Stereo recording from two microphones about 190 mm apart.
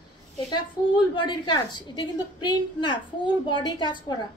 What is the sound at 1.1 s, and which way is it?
A woman's voice, 25° left (ahead or behind).